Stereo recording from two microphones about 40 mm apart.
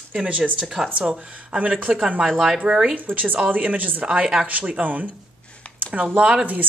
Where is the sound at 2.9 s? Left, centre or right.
Right.